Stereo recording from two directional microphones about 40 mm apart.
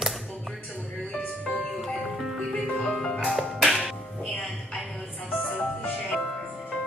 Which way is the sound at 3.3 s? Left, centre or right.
Centre.